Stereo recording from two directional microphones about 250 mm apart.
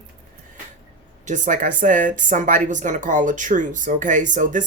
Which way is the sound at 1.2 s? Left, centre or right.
Right.